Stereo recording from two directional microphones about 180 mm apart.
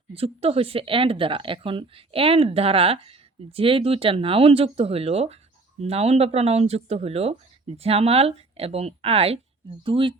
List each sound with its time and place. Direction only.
0.1 s speech: 30° right (ahead or behind)